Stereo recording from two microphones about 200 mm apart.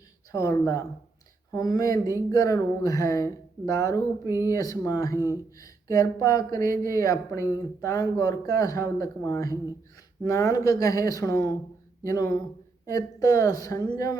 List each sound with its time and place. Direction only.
0.3 s speech: 15° left (ahead or behind)
4.3 s speech: 10° right (ahead or behind)
4.5 s speech: 15° left (ahead or behind)
5.1 s speech: 15° right (ahead or behind)
5.9 s speech: 15° left (ahead or behind)